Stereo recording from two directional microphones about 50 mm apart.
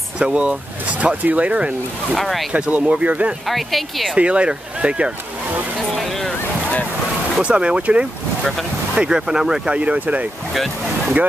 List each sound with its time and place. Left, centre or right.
0.2 s speech: right
2.1 s speech: centre
2.6 s speech: right
3.4 s speech: centre
4.1 s speech: right
5.9 s boat: centre
7.4 s speech: right
9.2 s speech: centre
9.8 s speech: right
10.5 s speech: centre